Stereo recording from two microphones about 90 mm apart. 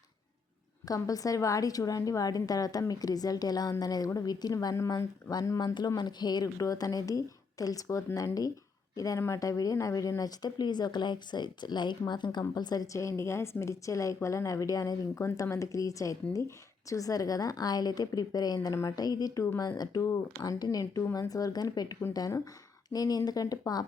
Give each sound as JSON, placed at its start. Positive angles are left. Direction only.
{"t": 0.9, "sound": "a woman's voice", "side_deg": 40}
{"t": 4.9, "sound": "a woman's voice", "side_deg": 50}
{"t": 20.0, "sound": "a woman's voice", "side_deg": 35}